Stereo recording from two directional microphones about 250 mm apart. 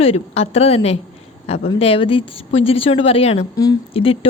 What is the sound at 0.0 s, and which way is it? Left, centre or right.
A woman's voice, left.